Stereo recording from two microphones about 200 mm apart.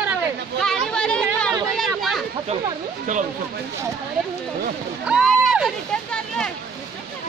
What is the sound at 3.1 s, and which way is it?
Speech, 35° right (ahead or behind).